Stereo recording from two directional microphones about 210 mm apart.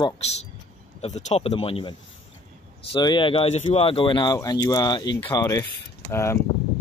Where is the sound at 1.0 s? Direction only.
30° left (ahead or behind); by 6.4 s 15° left (ahead or behind).